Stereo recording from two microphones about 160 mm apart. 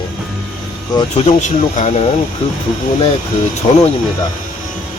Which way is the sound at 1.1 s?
50° left (ahead or behind).